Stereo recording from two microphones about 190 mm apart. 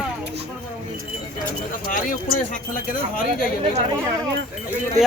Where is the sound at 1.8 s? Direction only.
45° left (ahead or behind).